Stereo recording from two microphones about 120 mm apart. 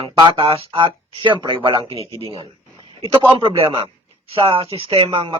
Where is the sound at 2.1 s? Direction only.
50° right (ahead or behind).